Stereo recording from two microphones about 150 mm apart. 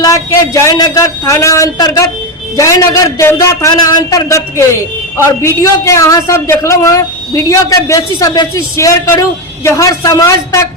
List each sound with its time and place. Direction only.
0.0 s a woman's voice: 20° left (ahead or behind)